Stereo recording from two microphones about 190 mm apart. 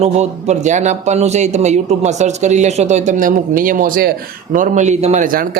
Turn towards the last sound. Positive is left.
turn(degrees=-45)  # may be behind; listen again after turning